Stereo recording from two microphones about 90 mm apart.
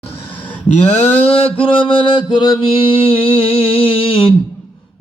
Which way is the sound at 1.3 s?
90° left.